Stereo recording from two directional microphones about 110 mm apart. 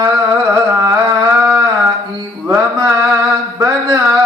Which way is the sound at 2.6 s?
30° right (ahead or behind).